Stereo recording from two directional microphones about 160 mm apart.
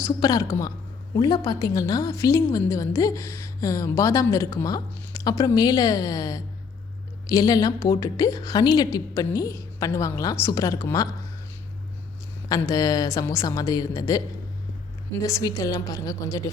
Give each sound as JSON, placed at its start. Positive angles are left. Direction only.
{"t": 0.0, "sound": "a woman's voice", "side_deg": 20}
{"t": 12.5, "sound": "a woman's voice", "side_deg": 20}
{"t": 15.2, "sound": "a woman's voice", "side_deg": 20}